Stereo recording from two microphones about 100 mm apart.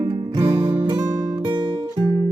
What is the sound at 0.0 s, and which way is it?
Music, 45° right (ahead or behind).